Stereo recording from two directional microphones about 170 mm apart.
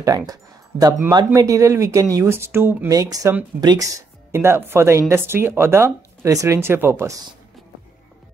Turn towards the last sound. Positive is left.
turn(degrees=0)  # may be behind; listen again after turning